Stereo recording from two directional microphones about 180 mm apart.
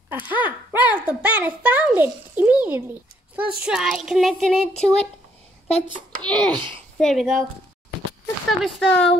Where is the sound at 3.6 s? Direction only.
5° right (ahead or behind).